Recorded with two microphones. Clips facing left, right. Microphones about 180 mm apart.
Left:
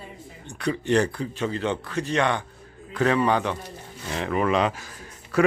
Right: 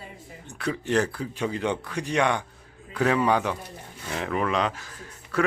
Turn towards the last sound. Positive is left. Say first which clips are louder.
# left 5 dB
turn(degrees=10)  # may be behind; listen again after turning